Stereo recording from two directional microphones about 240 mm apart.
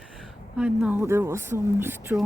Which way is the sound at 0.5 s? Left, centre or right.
Centre.